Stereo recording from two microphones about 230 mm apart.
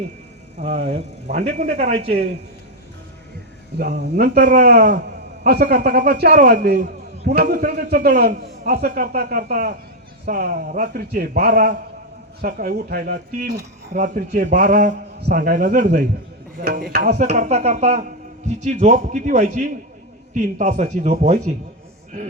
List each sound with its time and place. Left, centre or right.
0.6 s speech: right
3.8 s a man's voice: right